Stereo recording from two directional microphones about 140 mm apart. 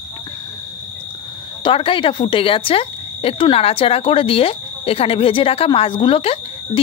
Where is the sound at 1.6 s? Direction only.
40° left (ahead or behind).